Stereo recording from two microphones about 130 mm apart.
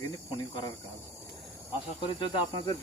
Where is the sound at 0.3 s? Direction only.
35° left (ahead or behind).